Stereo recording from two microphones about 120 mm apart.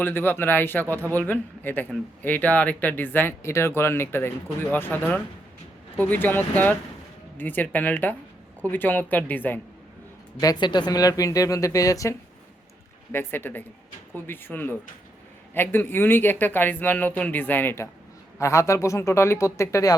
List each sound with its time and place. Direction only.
0.0 s speech: 15° left (ahead or behind)
10.4 s speech: 35° left (ahead or behind)
13.1 s speech: 15° left (ahead or behind)